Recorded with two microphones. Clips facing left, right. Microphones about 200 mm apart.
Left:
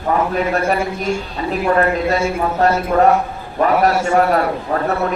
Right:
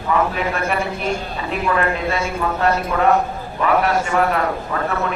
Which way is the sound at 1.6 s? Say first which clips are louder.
Left 4 dB; 40° left (ahead or behind).